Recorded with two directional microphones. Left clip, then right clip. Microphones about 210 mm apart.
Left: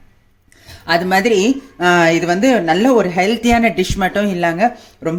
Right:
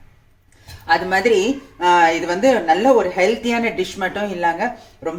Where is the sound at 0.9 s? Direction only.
50° left (ahead or behind).